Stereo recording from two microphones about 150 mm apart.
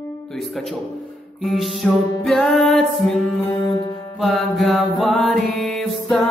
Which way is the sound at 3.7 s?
25° left (ahead or behind).